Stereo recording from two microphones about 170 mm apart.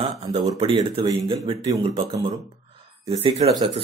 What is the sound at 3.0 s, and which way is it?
Speech, 40° right (ahead or behind).